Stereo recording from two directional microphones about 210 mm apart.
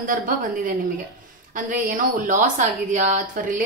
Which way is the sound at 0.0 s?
40° right (ahead or behind).